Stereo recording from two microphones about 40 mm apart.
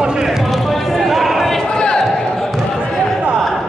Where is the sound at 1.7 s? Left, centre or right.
Centre.